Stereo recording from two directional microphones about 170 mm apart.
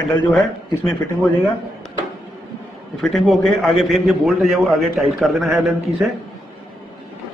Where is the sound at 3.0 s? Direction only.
Centre (ahead or behind).